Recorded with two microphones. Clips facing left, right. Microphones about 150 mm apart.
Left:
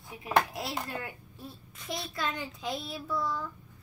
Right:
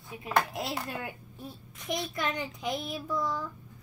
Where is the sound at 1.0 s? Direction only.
20° right (ahead or behind).